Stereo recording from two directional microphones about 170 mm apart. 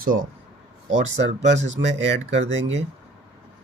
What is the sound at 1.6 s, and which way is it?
Speech, 90° right.